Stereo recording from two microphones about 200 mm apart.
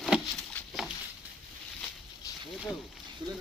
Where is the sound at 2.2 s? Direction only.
15° left (ahead or behind).